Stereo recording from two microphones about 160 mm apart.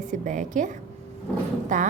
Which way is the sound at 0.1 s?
50° right (ahead or behind).